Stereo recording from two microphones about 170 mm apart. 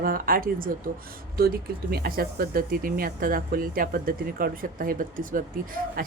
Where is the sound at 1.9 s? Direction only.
60° right (ahead or behind).